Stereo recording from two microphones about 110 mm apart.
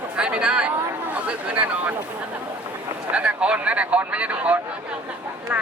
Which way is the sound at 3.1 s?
10° right (ahead or behind).